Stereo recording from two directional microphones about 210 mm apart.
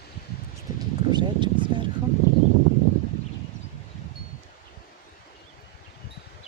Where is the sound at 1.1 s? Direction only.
20° right (ahead or behind).